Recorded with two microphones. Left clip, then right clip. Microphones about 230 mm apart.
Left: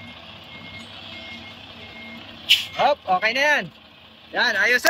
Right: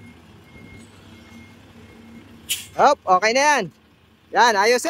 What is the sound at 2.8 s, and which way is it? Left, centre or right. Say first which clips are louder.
Speech: right 4 dB; centre.